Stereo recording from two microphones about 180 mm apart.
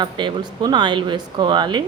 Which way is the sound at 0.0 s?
25° right (ahead or behind).